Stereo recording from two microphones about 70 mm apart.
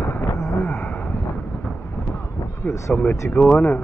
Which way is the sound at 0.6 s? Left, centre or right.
Centre.